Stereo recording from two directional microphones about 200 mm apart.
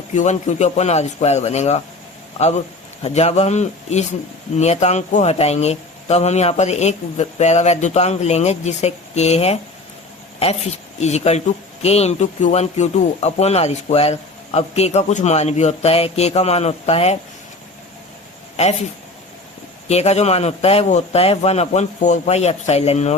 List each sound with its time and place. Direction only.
0.1 s speech: 35° left (ahead or behind)
18.5 s speech: 35° left (ahead or behind)
19.9 s speech: 30° left (ahead or behind)